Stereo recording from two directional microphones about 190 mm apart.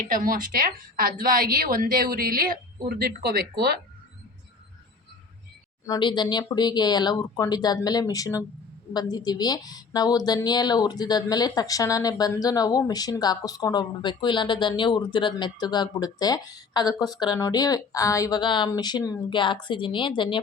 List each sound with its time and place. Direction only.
0.1 s a woman's voice: 45° right (ahead or behind)
5.8 s a woman's voice: 20° left (ahead or behind)